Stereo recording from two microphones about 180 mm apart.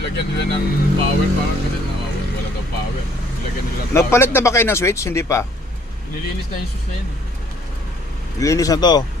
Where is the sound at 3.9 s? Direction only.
15° left (ahead or behind).